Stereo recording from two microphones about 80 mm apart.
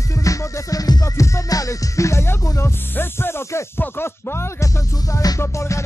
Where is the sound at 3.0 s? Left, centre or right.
Left.